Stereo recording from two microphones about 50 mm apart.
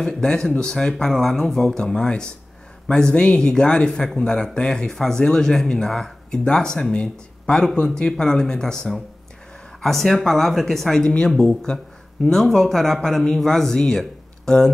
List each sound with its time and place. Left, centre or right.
0.0 s speech: centre
1.1 s speech: centre
11.1 s speech: centre
12.3 s speech: centre